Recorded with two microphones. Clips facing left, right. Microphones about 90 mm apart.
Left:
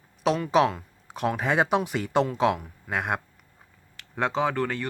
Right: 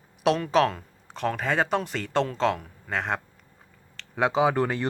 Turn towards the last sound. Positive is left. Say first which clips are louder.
# right 3 dB
turn(degrees=-20)  # may be behind; listen again after turning